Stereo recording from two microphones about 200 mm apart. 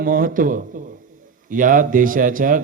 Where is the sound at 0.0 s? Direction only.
45° right (ahead or behind).